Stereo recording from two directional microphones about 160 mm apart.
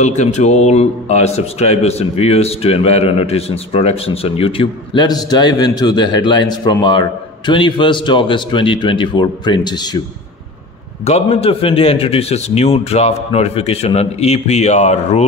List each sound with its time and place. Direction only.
0.0 s a man's voice: 45° left (ahead or behind); by 10.0 s 25° left (ahead or behind)
11.1 s a man's voice: 40° left (ahead or behind)